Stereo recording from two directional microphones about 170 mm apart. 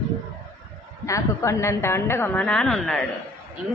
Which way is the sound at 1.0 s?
15° left (ahead or behind).